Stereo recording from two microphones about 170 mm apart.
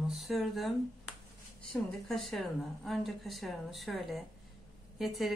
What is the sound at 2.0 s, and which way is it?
Speech, centre (ahead or behind).